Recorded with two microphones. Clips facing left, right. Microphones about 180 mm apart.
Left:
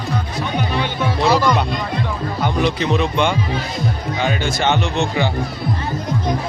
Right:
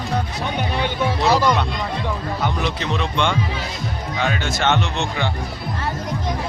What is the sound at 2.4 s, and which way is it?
Speech, 5° left (ahead or behind).